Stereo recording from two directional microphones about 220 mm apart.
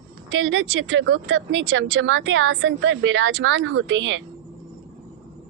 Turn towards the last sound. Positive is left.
turn(degrees=-55)  # may be behind; listen again after turning